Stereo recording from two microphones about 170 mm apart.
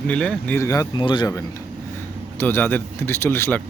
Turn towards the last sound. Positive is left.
turn(degrees=10)  # may be behind; listen again after turning